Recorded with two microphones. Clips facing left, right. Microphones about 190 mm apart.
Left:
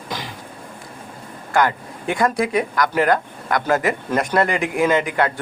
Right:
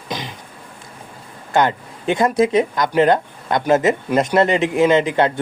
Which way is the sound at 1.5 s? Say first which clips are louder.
Right 2 dB; 25° right (ahead or behind).